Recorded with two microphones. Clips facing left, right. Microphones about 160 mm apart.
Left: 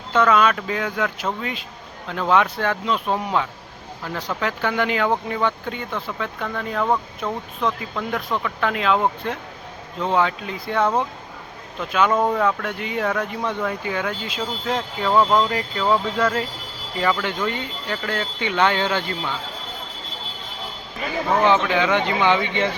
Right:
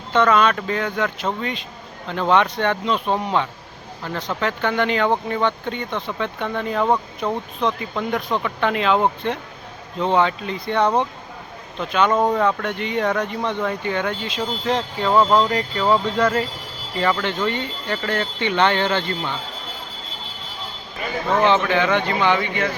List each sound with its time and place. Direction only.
0.1 s speech: 5° left (ahead or behind)
12.1 s speech: 10° right (ahead or behind)
12.4 s speech: 5° left (ahead or behind)
21.9 s speech: 15° left (ahead or behind)